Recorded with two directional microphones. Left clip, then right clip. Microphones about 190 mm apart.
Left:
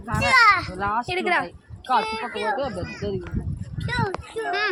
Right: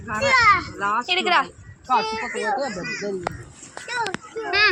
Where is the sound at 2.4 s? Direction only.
30° right (ahead or behind).